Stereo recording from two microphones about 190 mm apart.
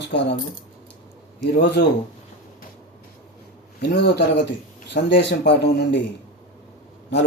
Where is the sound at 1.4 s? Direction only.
65° left (ahead or behind).